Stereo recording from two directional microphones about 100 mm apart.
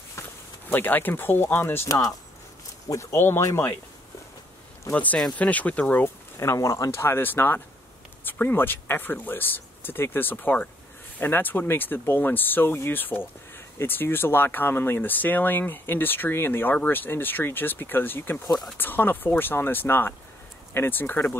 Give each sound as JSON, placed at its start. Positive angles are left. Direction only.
{"t": 0.7, "sound": "speech", "side_deg": 20}
{"t": 1.9, "sound": "speech", "side_deg": 35}
{"t": 4.9, "sound": "speech", "side_deg": 15}
{"t": 6.3, "sound": "speech", "side_deg": 30}